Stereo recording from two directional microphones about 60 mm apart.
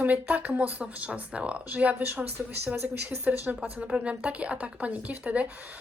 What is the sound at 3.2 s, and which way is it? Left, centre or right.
A woman's voice, right.